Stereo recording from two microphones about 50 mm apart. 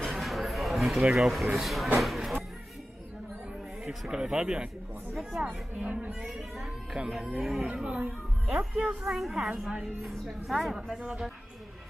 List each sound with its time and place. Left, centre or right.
0.0 s a sound: centre
1.0 s speech: centre
4.1 s speech: centre
5.8 s speech: right
6.2 s speech: centre
7.6 s speech: centre